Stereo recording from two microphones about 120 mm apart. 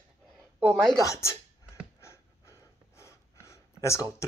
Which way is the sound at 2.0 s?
25° left (ahead or behind).